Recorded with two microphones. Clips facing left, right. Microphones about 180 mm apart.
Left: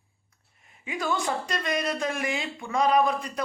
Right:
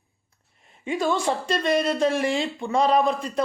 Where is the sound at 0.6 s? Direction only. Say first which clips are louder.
Right 7 dB; 30° right (ahead or behind).